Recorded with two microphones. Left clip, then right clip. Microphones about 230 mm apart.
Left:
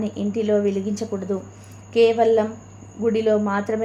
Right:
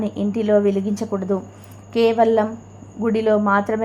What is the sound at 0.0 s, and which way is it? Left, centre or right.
A woman's voice, centre.